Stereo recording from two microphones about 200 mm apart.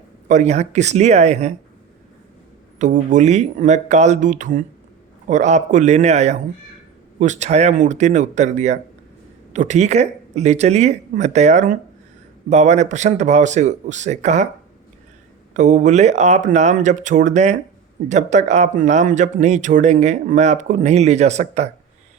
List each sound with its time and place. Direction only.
0.3 s speech: 35° right (ahead or behind)
2.7 s speech: 40° right (ahead or behind)
15.5 s speech: 40° right (ahead or behind)